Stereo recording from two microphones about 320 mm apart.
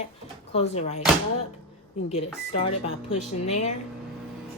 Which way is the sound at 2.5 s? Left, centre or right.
Centre.